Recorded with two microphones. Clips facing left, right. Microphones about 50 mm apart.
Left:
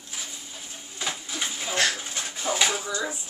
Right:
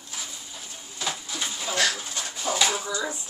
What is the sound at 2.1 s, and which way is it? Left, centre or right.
Dishes, left.